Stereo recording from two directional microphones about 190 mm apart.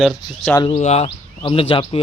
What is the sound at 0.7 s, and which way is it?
Speech, 35° left (ahead or behind).